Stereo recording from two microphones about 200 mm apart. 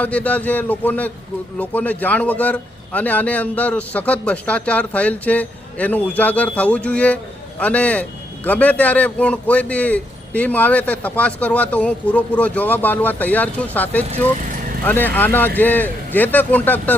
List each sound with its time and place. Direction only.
0.0 s a man's voice: 5° left (ahead or behind)